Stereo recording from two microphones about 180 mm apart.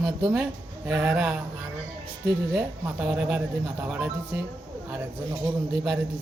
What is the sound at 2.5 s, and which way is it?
Speech, 5° right (ahead or behind).